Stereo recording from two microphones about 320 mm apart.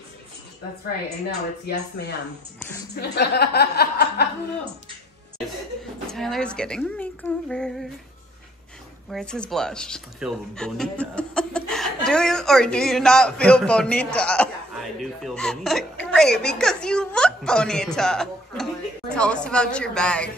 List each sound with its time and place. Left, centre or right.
1.7 s a woman's voice: left
6.1 s a man's voice: centre
9.1 s a man's voice: centre